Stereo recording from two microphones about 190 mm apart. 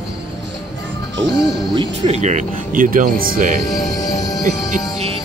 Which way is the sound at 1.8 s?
35° right (ahead or behind).